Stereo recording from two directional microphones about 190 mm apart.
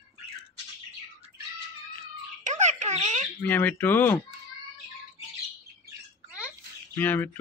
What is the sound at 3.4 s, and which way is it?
Speech, 10° left (ahead or behind).